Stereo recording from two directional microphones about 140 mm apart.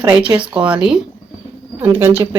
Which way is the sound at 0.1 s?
10° right (ahead or behind).